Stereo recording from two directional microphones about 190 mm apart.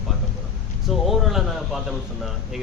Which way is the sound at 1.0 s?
Centre (ahead or behind).